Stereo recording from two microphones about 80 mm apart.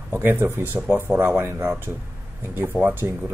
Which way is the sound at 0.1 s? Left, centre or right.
Right.